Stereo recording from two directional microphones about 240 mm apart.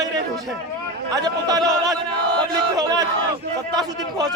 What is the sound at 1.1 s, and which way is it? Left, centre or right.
Speech, centre.